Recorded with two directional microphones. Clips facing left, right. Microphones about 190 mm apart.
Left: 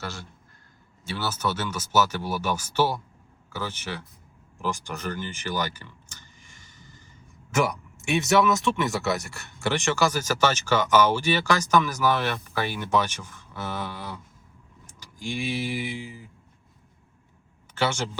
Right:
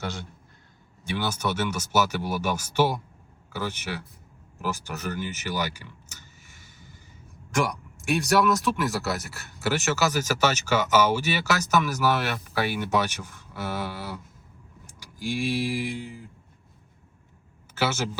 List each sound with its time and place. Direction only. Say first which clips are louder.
0.0 s a man's voice: right 3 dB; 20° right (ahead or behind)
7.5 s speech: left 2 dB; 5° left (ahead or behind)
17.7 s speech: even; 5° right (ahead or behind)